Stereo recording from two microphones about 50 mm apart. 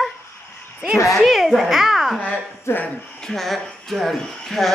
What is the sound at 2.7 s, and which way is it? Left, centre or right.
Speech, left.